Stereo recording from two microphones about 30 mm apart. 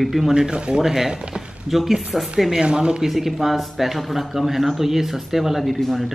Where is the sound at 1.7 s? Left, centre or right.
Centre.